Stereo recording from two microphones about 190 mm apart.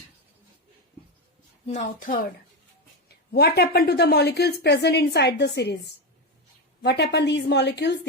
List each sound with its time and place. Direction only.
1.6 s a woman's voice: 40° left (ahead or behind)
3.3 s a woman's voice: 55° left (ahead or behind)
6.8 s a woman's voice: 60° left (ahead or behind)